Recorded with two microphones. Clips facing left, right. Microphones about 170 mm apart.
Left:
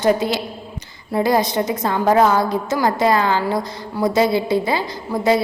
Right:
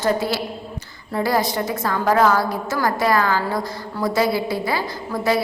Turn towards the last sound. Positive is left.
turn(degrees=20)  # may be behind; listen again after turning